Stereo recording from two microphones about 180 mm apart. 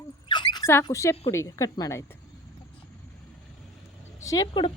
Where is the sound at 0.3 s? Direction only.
25° left (ahead or behind).